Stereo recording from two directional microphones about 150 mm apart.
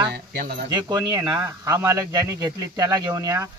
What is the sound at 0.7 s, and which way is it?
Speech, 25° right (ahead or behind).